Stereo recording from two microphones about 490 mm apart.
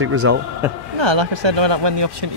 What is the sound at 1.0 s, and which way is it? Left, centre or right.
Speech, right.